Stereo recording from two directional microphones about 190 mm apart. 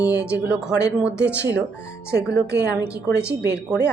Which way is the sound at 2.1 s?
60° right (ahead or behind).